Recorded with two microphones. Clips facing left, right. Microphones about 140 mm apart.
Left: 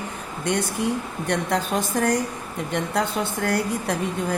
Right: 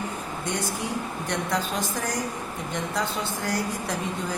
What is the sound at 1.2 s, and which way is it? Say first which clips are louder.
Speech: left 5 dB; 55° left (ahead or behind).